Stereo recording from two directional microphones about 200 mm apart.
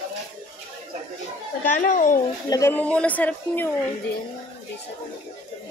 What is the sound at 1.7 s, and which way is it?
Speech, 40° left (ahead or behind).